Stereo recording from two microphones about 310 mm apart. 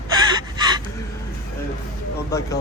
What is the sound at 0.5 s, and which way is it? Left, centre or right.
Gasp, centre.